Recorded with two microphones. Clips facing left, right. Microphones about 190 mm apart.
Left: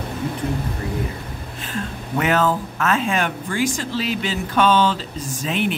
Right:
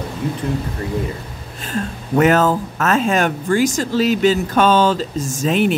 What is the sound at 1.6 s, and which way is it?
Speech, 40° right (ahead or behind).